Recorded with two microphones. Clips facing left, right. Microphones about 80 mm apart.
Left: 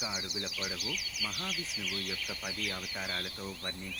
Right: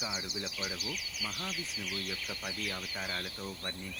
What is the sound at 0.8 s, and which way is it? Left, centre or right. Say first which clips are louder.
Speech: left 1 dB; right.